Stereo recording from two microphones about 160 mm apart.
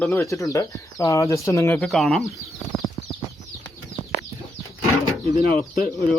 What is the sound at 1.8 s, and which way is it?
Speech, centre (ahead or behind).